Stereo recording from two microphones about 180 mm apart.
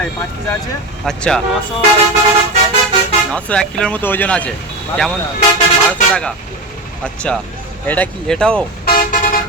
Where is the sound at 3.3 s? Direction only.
5° left (ahead or behind).